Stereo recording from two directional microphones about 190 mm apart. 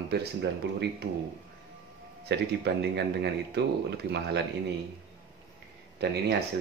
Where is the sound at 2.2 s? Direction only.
60° right (ahead or behind).